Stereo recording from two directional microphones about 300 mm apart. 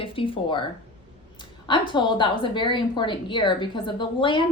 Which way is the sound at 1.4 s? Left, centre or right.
Centre.